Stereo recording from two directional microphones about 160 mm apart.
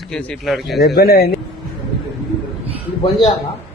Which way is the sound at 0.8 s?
70° left (ahead or behind).